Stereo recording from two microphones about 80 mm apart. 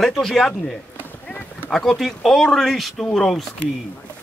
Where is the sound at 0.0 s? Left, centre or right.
Centre.